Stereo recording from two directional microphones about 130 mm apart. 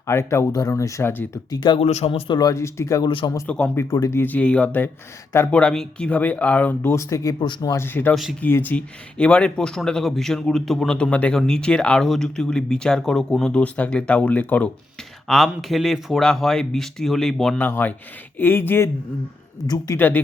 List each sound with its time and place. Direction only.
0.1 s speech: 20° left (ahead or behind)
1.5 s speech: 35° left (ahead or behind)
1.8 s speech: 55° left (ahead or behind); by 3.1 s 25° left (ahead or behind)
3.1 s speech: 40° left (ahead or behind)
3.4 s speech: 10° left (ahead or behind)
3.8 s speech: 25° left (ahead or behind)
8.1 s speech: centre (ahead or behind)
8.4 s speech: 15° left (ahead or behind)
15.3 s speech: centre (ahead or behind)
17.6 s speech: 15° left (ahead or behind)
19.6 s speech: 30° left (ahead or behind)
20.0 s speech: 15° left (ahead or behind)